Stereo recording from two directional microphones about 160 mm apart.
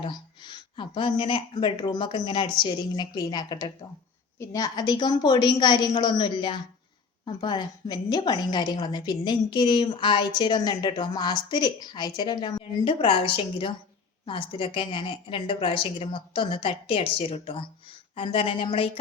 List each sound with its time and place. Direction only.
0.0 s a woman's voice: 30° left (ahead or behind)